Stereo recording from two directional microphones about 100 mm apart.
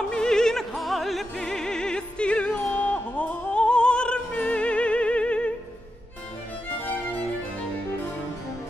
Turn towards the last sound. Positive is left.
turn(degrees=20)  # may be behind; listen again after turning